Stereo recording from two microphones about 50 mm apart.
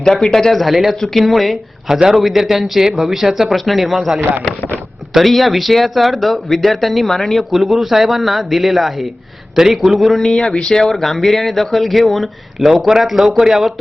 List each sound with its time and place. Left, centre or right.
0.0 s speech: centre
4.4 s speech: left
5.1 s speech: centre